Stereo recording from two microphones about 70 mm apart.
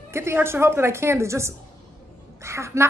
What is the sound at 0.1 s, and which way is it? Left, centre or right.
A woman's voice, right.